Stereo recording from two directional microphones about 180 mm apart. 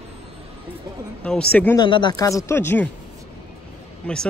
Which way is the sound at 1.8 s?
25° left (ahead or behind).